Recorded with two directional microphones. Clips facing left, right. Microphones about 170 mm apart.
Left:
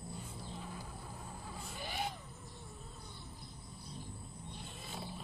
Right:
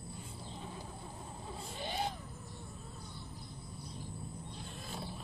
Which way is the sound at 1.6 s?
30° right (ahead or behind).